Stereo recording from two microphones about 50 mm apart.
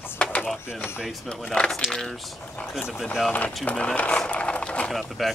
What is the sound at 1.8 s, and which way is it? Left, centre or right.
Speech, centre.